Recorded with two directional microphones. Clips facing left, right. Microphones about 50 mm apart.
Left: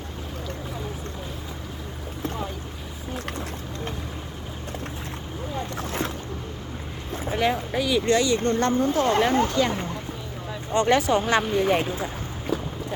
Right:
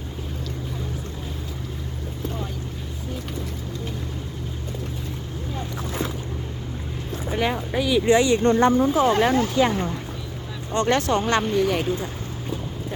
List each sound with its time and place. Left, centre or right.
5.7 s boat: left
7.3 s speech: centre
8.1 s speech: right; by 9.3 s centre
9.6 s speech: centre
10.7 s speech: centre
11.6 s speech: centre